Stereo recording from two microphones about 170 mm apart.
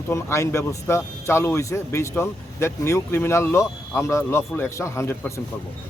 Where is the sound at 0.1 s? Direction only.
15° left (ahead or behind).